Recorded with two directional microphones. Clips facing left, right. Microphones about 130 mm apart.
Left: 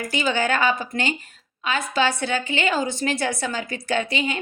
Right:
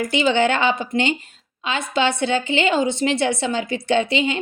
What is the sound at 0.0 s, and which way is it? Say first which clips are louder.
A woman's voice: right 5 dB; 25° right (ahead or behind).